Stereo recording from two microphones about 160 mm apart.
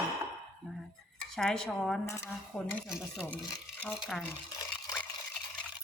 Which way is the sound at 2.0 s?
15° left (ahead or behind).